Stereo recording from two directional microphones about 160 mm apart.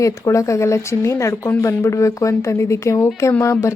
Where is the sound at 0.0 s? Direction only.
20° left (ahead or behind).